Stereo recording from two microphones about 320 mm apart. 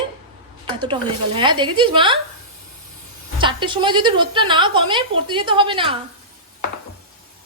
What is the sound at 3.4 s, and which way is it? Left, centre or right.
A woman's voice, centre.